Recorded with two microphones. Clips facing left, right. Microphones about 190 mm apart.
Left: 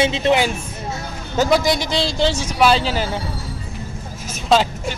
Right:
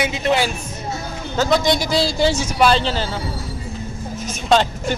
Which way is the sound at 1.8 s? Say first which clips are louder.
Right 2 dB; 5° right (ahead or behind).